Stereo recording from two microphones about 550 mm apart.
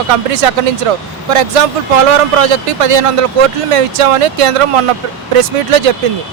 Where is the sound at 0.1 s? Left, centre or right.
Right.